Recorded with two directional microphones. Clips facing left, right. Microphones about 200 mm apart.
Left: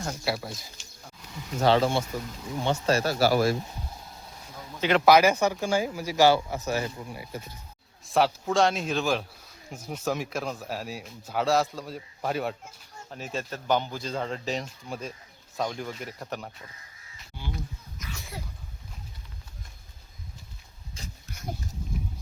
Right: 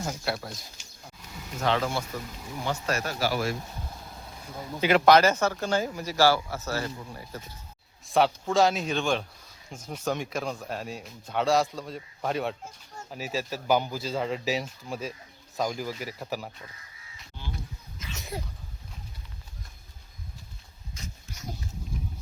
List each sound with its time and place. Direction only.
0.0 s a man's voice: centre (ahead or behind)
1.6 s speech: 30° left (ahead or behind)
4.8 s a man's voice: 5° right (ahead or behind)
5.0 s speech: 10° left (ahead or behind)
8.0 s a man's voice: centre (ahead or behind)
18.0 s sneeze: 20° right (ahead or behind)
21.0 s pig: 30° left (ahead or behind)